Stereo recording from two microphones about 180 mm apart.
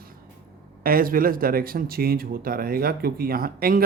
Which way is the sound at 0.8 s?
55° right (ahead or behind).